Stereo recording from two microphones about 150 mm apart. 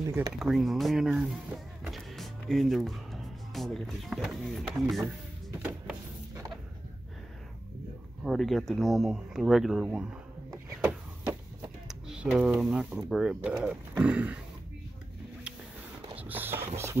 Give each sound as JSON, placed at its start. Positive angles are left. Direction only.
{"t": 0.0, "sound": "speech", "side_deg": -20}
{"t": 0.3, "sound": "speech", "side_deg": 0}
{"t": 8.2, "sound": "speech", "side_deg": 0}
{"t": 10.8, "sound": "a sound", "side_deg": -10}
{"t": 11.9, "sound": "speech", "side_deg": -5}
{"t": 16.2, "sound": "a sound", "side_deg": -10}